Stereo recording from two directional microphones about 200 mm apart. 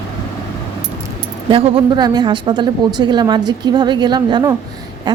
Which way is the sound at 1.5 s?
30° right (ahead or behind).